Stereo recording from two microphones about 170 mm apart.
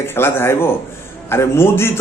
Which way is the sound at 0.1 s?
15° left (ahead or behind).